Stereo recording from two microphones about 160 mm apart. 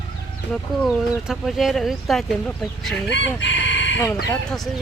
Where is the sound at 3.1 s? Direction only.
90° left.